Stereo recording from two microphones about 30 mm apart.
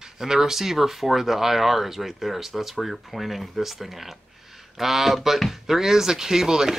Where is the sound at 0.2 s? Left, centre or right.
Centre.